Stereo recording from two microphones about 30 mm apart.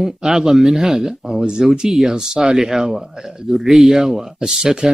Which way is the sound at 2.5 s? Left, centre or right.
Centre.